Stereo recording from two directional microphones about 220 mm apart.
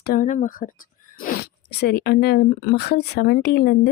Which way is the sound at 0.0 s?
40° left (ahead or behind).